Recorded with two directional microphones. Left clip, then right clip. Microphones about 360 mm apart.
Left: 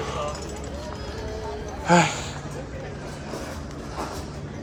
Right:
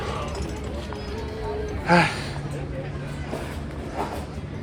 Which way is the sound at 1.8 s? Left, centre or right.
Centre.